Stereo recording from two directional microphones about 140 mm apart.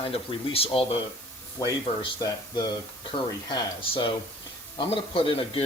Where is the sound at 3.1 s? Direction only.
35° left (ahead or behind).